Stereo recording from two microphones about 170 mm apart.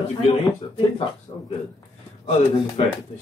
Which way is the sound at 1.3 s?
30° left (ahead or behind).